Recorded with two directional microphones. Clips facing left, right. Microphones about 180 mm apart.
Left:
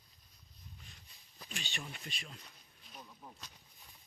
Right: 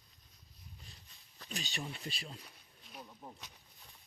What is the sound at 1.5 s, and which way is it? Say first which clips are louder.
Speech: right 4 dB; 35° right (ahead or behind).